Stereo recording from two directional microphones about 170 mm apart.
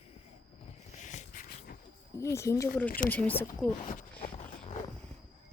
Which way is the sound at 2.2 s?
15° left (ahead or behind).